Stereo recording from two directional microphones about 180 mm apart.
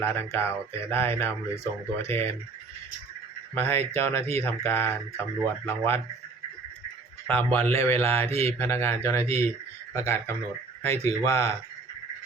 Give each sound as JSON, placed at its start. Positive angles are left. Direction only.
{"t": 0.0, "sound": "speech", "side_deg": 10}
{"t": 3.5, "sound": "speech", "side_deg": 10}
{"t": 7.3, "sound": "speech", "side_deg": 10}